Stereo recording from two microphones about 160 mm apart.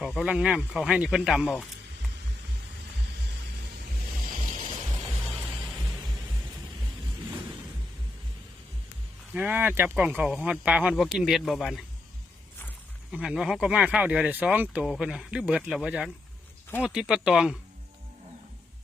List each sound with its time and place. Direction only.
0.0 s speech: centre (ahead or behind)
4.4 s music: 55° right (ahead or behind)
5.4 s music: centre (ahead or behind)
9.3 s speech: 10° right (ahead or behind)
13.1 s speech: 5° right (ahead or behind)